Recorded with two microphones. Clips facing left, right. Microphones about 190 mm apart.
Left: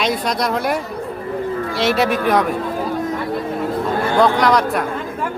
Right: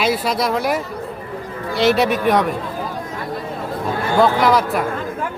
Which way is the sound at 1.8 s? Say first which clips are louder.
Right 2 dB; centre (ahead or behind).